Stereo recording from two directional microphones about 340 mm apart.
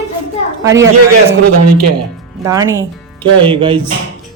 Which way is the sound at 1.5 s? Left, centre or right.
Right.